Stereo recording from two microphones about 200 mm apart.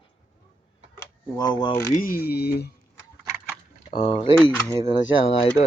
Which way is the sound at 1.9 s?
45° left (ahead or behind).